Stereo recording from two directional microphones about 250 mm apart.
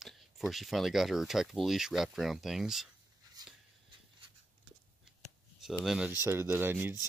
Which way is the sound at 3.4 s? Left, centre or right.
Centre.